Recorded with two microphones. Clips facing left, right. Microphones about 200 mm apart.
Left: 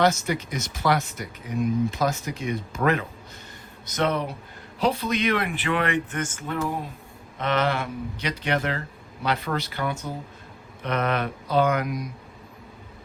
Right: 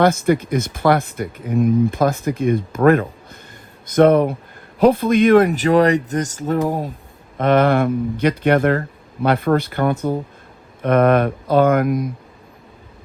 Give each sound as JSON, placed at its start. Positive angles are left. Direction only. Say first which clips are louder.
{"t": 0.0, "sound": "speech", "louder": "right 7 dB", "side_deg": -55}